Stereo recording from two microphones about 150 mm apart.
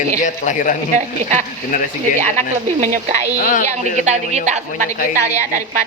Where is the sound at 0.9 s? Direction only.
50° right (ahead or behind).